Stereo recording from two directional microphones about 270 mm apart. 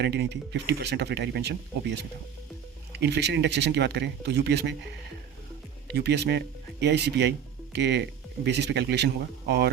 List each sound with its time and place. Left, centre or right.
0.0 s speech: right
5.9 s speech: right